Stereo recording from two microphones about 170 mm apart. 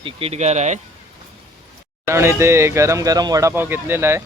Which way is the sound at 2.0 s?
15° right (ahead or behind).